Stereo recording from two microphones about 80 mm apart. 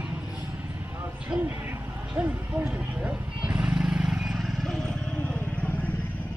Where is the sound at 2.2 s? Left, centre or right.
Right; by 6.0 s left.